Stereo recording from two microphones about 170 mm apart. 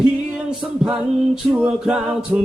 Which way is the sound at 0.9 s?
5° right (ahead or behind).